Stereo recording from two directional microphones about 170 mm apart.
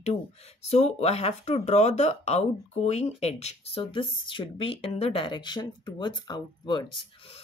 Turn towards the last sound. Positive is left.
turn(degrees=25)  # may be behind; listen again after turning